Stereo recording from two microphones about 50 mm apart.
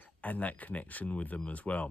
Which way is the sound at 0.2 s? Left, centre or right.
Left.